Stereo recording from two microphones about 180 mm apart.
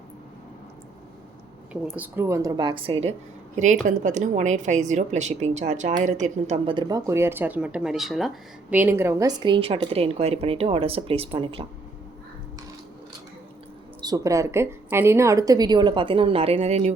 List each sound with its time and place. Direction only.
1.7 s a woman's voice: 10° right (ahead or behind); by 3.2 s 35° right (ahead or behind)
3.6 s a woman's voice: 45° right (ahead or behind)
6.7 s speech: 25° right (ahead or behind); by 8.3 s centre (ahead or behind)
8.7 s a woman's voice: 10° right (ahead or behind); by 11.6 s 30° right (ahead or behind)
14.0 s a woman's voice: 20° right (ahead or behind); by 16.9 s 40° right (ahead or behind)